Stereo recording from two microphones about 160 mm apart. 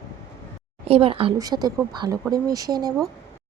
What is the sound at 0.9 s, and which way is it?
Speech, 35° right (ahead or behind).